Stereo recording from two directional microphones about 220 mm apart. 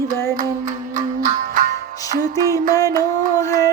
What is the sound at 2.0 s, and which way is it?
Music, 15° left (ahead or behind).